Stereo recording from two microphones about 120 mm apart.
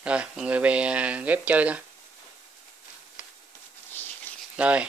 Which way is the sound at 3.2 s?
15° right (ahead or behind).